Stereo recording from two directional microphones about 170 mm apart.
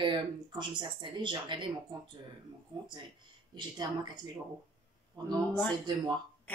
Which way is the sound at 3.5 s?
25° right (ahead or behind).